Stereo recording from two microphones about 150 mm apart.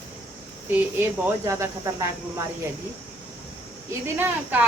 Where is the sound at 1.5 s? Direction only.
20° right (ahead or behind).